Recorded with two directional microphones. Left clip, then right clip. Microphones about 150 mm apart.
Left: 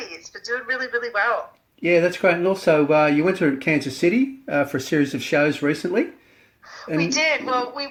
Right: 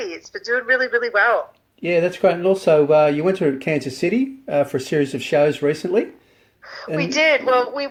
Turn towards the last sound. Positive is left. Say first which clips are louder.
# right 6 dB
turn(degrees=-45)  # may be behind; listen again after turning